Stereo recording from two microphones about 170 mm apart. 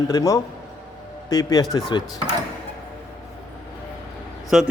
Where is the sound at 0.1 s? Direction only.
20° left (ahead or behind).